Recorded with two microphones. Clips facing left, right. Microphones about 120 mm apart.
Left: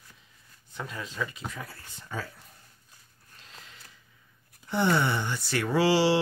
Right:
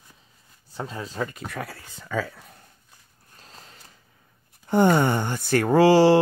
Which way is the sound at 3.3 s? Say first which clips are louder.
Right 3 dB; 40° right (ahead or behind).